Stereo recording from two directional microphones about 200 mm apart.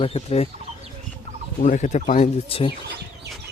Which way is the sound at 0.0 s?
30° left (ahead or behind).